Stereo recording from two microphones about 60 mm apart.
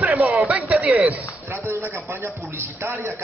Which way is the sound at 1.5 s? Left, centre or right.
Right.